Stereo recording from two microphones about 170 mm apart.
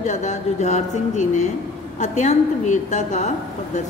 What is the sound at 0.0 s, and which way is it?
A woman's voice, 45° left (ahead or behind).